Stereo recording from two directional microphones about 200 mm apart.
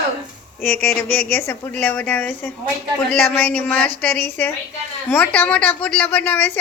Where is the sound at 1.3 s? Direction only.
10° left (ahead or behind).